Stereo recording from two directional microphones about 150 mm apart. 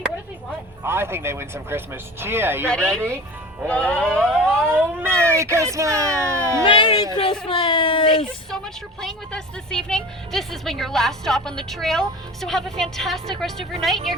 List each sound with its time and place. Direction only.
0.9 s speech: 15° right (ahead or behind)
2.6 s speech: 5° left (ahead or behind)
4.6 s speech: 15° right (ahead or behind)
6.7 s speech: 35° left (ahead or behind)
8.4 s speech: 5° left (ahead or behind)